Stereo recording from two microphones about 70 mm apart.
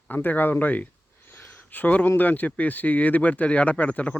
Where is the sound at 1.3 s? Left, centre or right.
Left.